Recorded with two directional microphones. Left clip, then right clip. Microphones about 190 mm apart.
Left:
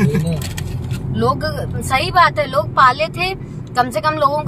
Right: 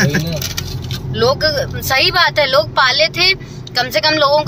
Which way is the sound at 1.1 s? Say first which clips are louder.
Right 5 dB; centre (ahead or behind).